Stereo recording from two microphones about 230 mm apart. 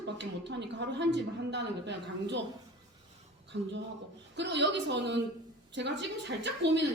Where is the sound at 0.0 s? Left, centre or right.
Right.